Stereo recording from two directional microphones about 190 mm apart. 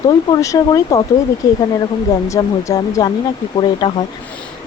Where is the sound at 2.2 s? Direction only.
15° left (ahead or behind).